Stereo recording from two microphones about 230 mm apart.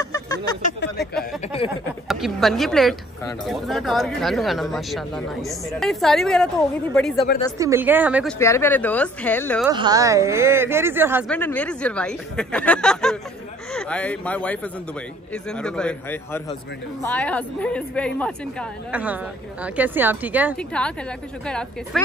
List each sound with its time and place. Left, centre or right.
0.0 s a sound: centre
0.9 s speech: centre
7.5 s a woman's voice: centre
8.4 s speech: centre
9.7 s a woman's voice: centre
11.2 s speech: centre
18.9 s a woman's voice: centre
20.5 s speech: centre